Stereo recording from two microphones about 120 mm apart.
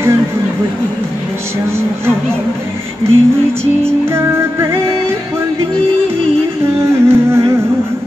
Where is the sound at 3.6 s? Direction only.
20° right (ahead or behind).